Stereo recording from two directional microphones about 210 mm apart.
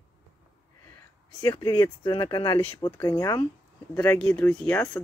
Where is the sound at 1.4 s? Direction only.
20° left (ahead or behind).